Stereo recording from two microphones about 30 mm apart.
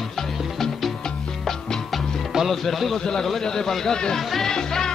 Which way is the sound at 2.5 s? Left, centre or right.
Centre.